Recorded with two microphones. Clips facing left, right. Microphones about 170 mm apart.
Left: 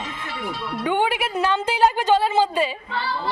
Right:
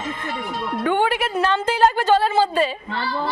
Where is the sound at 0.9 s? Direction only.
15° left (ahead or behind).